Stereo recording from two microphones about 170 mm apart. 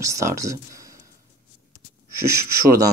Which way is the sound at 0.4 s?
20° right (ahead or behind).